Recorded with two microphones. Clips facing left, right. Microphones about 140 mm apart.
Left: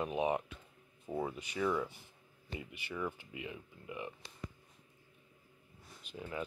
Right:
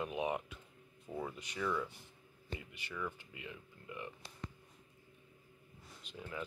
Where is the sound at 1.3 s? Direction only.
5° left (ahead or behind).